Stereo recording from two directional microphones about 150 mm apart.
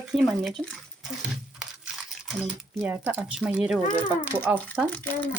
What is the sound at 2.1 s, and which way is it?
Speech, 5° right (ahead or behind).